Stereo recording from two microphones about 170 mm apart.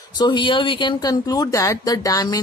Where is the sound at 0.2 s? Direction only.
25° left (ahead or behind).